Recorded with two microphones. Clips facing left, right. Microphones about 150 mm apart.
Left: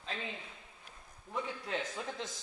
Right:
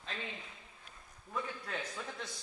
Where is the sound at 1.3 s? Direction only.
20° left (ahead or behind).